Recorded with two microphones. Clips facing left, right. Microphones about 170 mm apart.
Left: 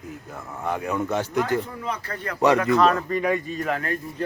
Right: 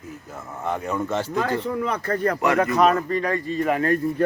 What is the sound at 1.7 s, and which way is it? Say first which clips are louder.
Speech: right 7 dB; 60° right (ahead or behind).